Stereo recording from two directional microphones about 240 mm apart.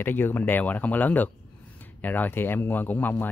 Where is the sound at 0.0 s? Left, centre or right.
Centre.